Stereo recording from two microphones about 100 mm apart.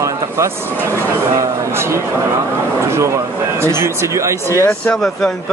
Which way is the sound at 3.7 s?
25° right (ahead or behind).